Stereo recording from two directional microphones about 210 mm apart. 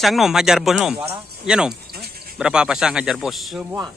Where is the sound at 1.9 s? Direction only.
45° right (ahead or behind).